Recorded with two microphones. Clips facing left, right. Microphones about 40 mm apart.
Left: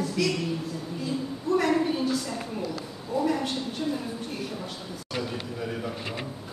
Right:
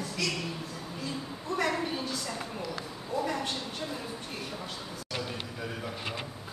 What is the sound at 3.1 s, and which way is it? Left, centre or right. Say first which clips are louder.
Speech: left 5 dB; centre.